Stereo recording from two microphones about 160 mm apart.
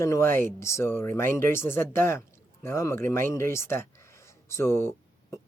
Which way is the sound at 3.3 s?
15° left (ahead or behind).